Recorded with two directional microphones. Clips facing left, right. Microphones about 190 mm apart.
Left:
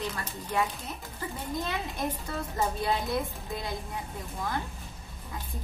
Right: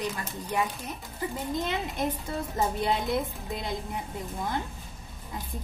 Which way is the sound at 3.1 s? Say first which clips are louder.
Right 2 dB; 20° right (ahead or behind).